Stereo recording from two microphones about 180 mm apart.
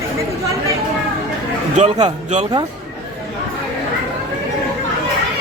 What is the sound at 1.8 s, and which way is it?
Speech, 35° right (ahead or behind).